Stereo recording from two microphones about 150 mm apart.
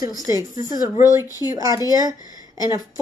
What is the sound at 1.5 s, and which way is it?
Speech, 20° right (ahead or behind).